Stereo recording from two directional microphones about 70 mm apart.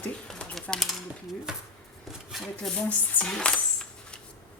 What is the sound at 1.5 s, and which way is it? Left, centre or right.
Speech, centre.